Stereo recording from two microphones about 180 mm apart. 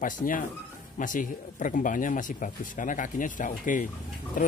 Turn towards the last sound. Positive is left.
turn(degrees=50)  # may be behind; listen again after turning